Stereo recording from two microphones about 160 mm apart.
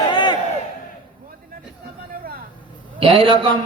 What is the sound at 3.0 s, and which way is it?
Speech, 35° right (ahead or behind).